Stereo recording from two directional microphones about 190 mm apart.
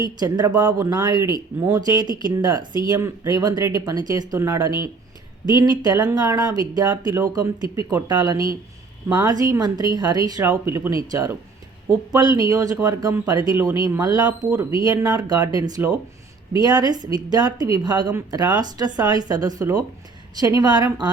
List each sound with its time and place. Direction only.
0.2 s speech: 20° right (ahead or behind)
14.3 s speech: 10° right (ahead or behind)
14.8 s speech: 20° right (ahead or behind)